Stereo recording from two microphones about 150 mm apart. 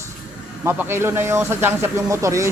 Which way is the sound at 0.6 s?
15° right (ahead or behind).